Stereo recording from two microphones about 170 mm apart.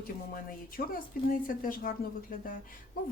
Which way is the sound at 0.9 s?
55° left (ahead or behind).